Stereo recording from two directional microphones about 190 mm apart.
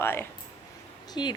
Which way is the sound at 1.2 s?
25° left (ahead or behind).